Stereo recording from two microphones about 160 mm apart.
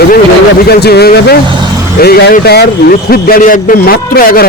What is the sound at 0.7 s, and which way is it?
A man's voice, 85° left.